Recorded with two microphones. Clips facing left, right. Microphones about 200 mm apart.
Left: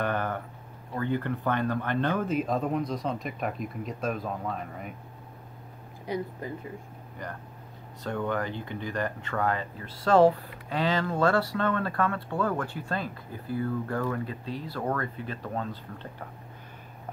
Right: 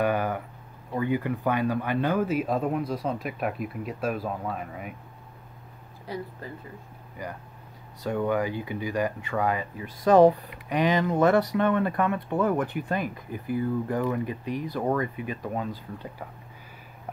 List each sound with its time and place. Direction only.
0.0 s a sound: 10° right (ahead or behind)
0.9 s speech: 10° right (ahead or behind)
6.0 s speech: 20° left (ahead or behind)
8.0 s speech: 10° right (ahead or behind)